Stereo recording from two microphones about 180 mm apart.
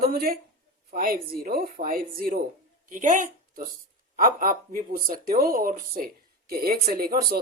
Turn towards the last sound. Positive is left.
turn(degrees=-55)  # may be behind; listen again after turning